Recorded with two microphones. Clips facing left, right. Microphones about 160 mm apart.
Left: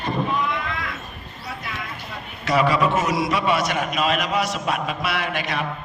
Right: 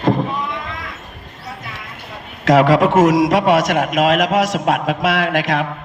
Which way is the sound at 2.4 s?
90° right.